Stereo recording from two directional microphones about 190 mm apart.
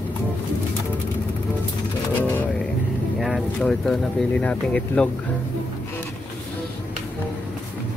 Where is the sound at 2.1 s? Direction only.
10° left (ahead or behind).